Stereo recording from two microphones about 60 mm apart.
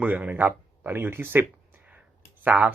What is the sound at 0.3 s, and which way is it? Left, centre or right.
Speech, right.